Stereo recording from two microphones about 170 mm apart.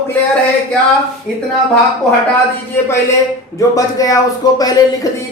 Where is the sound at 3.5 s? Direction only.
20° left (ahead or behind).